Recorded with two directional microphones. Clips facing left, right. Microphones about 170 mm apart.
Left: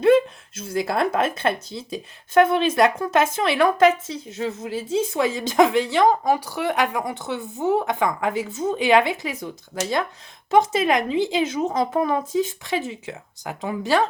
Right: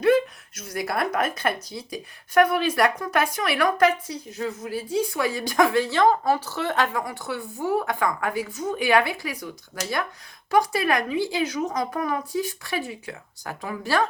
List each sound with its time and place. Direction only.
0.0 s speech: 25° left (ahead or behind)